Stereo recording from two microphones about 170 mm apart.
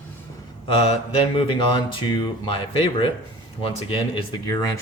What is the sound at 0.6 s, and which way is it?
Mantra, 35° left (ahead or behind).